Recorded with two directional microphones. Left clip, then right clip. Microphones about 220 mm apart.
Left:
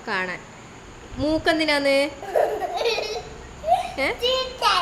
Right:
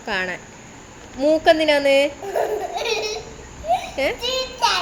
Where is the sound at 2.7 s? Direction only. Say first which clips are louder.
Right 1 dB; 10° left (ahead or behind).